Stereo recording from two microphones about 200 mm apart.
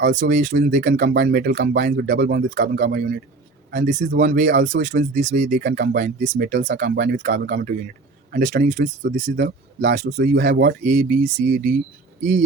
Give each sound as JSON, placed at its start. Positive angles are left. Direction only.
{"t": 0.0, "sound": "speech", "side_deg": -40}
{"t": 3.7, "sound": "speech", "side_deg": -40}
{"t": 10.4, "sound": "speech", "side_deg": -50}